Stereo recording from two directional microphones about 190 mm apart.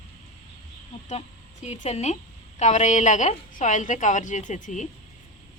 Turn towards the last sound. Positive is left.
turn(degrees=40)  # may be behind; listen again after turning